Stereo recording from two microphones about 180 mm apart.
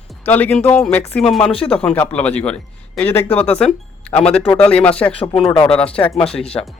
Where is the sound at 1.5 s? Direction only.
30° left (ahead or behind).